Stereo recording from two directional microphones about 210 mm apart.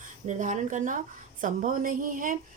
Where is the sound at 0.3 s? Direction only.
35° right (ahead or behind).